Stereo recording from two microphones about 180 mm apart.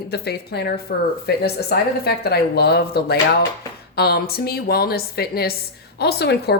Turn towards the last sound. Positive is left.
turn(degrees=65)  # may be behind; listen again after turning